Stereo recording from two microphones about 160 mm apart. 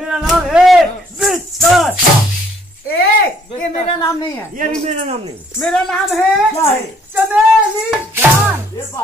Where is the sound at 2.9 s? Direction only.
75° left (ahead or behind).